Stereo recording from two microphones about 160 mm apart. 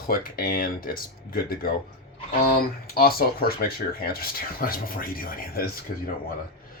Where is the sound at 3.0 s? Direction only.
70° left (ahead or behind).